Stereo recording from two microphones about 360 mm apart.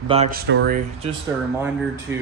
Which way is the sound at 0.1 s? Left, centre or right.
Centre.